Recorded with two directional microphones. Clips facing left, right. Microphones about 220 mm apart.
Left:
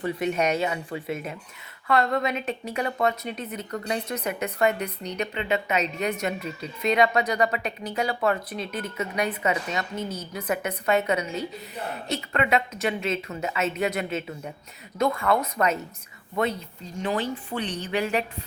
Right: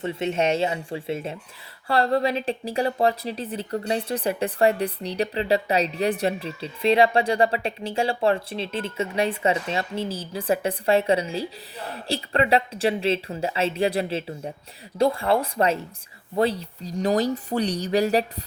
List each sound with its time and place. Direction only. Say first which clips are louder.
0.0 s speech: right 1 dB; 25° right (ahead or behind)